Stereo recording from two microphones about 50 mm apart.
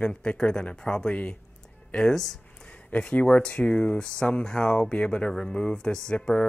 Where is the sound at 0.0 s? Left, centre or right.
Left.